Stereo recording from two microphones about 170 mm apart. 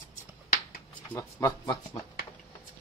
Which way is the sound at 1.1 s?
20° left (ahead or behind).